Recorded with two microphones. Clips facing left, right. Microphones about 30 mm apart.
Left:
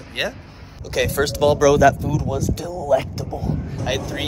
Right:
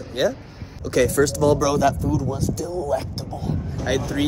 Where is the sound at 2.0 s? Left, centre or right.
Left.